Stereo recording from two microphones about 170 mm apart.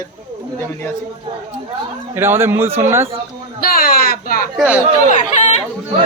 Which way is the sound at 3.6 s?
60° left (ahead or behind).